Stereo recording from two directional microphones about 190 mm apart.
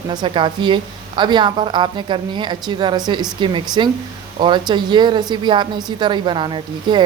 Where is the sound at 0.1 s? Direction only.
25° right (ahead or behind).